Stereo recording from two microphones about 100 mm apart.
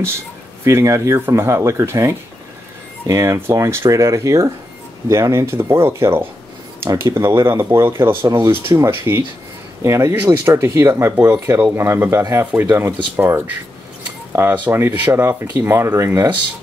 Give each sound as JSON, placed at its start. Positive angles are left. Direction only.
{"t": 0.7, "sound": "speech", "side_deg": -30}